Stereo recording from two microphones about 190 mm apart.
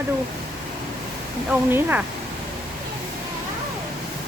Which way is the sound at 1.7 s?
10° right (ahead or behind).